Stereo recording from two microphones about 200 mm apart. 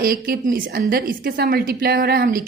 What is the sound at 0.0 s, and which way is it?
A woman's voice, 45° right (ahead or behind).